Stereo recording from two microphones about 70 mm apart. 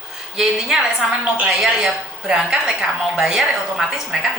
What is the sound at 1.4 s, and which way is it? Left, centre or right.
A woman's voice, centre.